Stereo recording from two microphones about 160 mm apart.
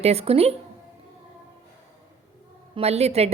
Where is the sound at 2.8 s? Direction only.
40° right (ahead or behind).